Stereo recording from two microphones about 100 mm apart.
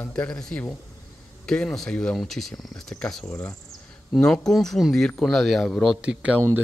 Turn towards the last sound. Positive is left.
turn(degrees=-25)  # may be behind; listen again after turning